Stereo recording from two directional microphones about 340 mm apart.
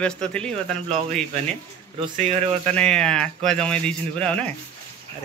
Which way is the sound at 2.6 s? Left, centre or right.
Centre.